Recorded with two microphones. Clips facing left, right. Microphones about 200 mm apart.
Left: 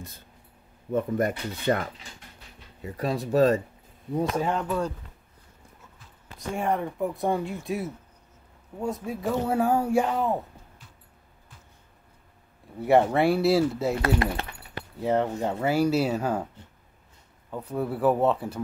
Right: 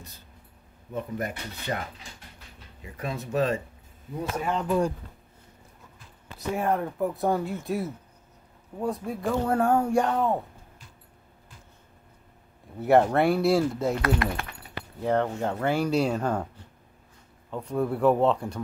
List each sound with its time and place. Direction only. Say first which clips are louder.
0.9 s speech: left 7 dB; 50° left (ahead or behind)
2.8 s speech: left 6 dB; 35° left (ahead or behind)
4.6 s speech: right 3 dB; 15° right (ahead or behind)
6.3 s speech: right 1 dB; 5° right (ahead or behind)
12.8 s speech: even; centre (ahead or behind)
14.0 s speech: left 1 dB; 25° left (ahead or behind)
15.0 s speech: even; 5° left (ahead or behind)
17.5 s speech: right 2 dB; 5° left (ahead or behind)